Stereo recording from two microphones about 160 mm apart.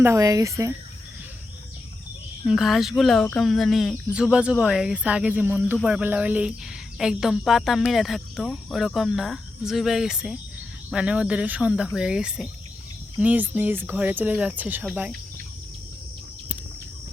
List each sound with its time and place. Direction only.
0.0 s speech: 20° right (ahead or behind)
2.4 s speech: centre (ahead or behind)